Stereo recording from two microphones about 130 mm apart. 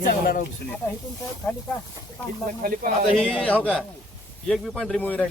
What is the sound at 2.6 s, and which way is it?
Speech, 90° right.